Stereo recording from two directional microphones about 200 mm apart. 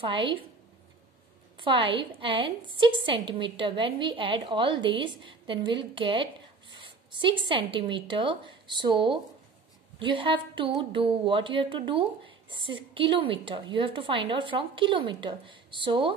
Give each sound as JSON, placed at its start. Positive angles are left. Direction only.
{"t": 0.0, "sound": "speech", "side_deg": -25}
{"t": 1.6, "sound": "speech", "side_deg": -25}